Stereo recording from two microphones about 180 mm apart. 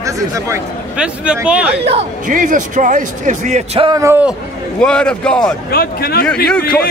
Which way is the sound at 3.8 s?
20° right (ahead or behind).